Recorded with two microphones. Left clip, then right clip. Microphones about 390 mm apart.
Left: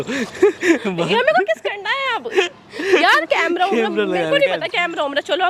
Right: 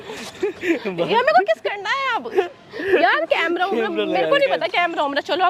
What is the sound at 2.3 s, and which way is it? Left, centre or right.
Speech, centre.